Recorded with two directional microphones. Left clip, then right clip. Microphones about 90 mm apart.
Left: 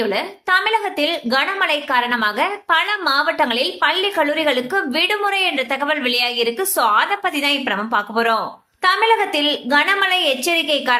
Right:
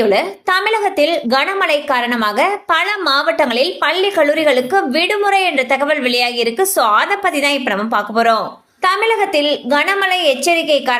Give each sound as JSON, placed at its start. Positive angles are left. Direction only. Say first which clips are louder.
{"t": 0.0, "sound": "a woman's voice", "louder": "right 7 dB", "side_deg": -55}